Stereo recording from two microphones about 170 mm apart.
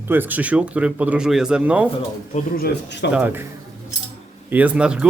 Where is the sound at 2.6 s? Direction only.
90° left.